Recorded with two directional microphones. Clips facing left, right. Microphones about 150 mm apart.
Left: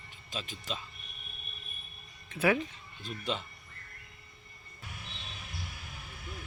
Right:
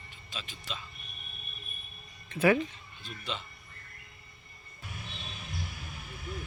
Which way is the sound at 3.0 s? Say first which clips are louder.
Left 4 dB; 45° left (ahead or behind).